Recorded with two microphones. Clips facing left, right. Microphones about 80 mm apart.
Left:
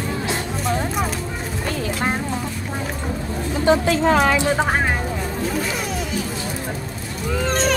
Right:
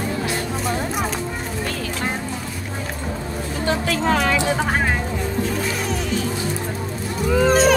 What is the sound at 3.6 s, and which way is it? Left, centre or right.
Speech, left.